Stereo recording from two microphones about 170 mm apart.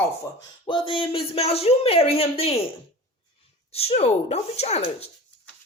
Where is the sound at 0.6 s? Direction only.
30° left (ahead or behind).